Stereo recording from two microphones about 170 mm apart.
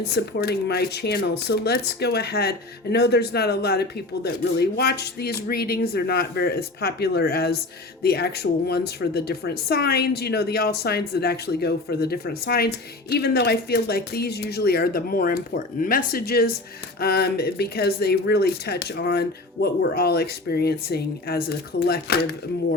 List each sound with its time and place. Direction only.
0.0 s a woman's voice: 70° left (ahead or behind)